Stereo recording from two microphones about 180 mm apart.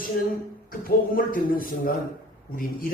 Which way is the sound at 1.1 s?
50° left (ahead or behind).